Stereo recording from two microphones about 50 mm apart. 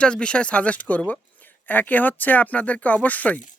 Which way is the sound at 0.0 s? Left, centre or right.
Centre.